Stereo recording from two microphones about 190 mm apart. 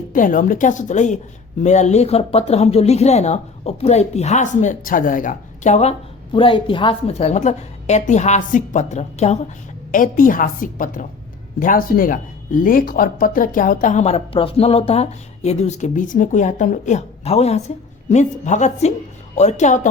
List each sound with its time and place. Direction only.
0.1 s a woman's voice: 45° left (ahead or behind)